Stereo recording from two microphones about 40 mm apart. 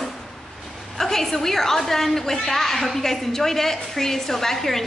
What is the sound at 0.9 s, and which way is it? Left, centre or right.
A woman's voice, centre.